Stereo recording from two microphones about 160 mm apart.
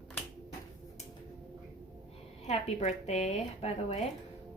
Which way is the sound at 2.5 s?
40° left (ahead or behind).